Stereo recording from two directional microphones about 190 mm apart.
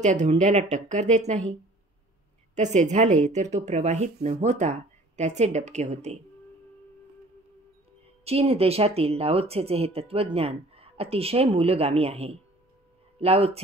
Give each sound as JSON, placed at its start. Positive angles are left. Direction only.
{"t": 0.0, "sound": "speech", "side_deg": -40}
{"t": 2.5, "sound": "speech", "side_deg": -40}
{"t": 8.2, "sound": "speech", "side_deg": -30}